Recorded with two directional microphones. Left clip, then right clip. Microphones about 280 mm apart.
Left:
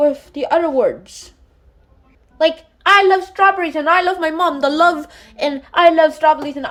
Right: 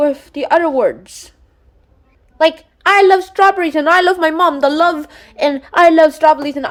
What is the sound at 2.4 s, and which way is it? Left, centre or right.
A woman's voice, centre.